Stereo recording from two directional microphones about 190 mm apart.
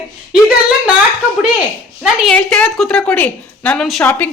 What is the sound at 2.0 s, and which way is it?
A woman's voice, centre (ahead or behind).